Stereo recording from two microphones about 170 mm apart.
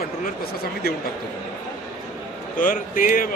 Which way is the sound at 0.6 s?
65° left (ahead or behind).